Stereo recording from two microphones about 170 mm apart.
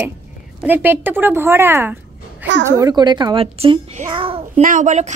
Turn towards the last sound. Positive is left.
turn(degrees=-45)  # may be behind; listen again after turning